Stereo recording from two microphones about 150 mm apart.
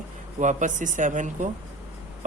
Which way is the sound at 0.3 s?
55° right (ahead or behind).